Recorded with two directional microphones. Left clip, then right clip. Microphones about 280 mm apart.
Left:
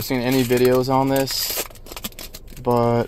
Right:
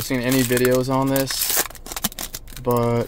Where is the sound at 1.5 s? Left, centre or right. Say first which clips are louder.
Right 4 dB; right.